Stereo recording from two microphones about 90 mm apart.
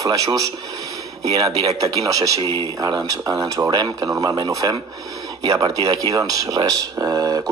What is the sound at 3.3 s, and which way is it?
A man's voice, 40° right (ahead or behind).